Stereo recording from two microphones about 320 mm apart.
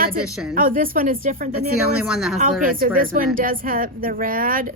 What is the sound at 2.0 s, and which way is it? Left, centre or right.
Speech, centre.